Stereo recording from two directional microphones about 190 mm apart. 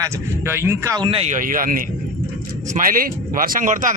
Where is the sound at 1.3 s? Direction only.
45° right (ahead or behind).